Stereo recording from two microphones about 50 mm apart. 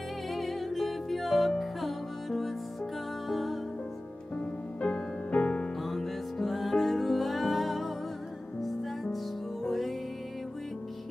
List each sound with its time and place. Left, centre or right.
0.3 s music: centre
4.4 s music: left
5.8 s music: centre